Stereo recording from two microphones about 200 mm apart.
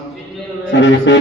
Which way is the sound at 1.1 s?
65° left (ahead or behind).